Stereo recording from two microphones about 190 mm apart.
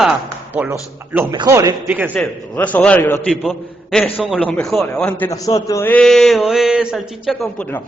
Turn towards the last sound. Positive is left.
turn(degrees=10)  # may be behind; listen again after turning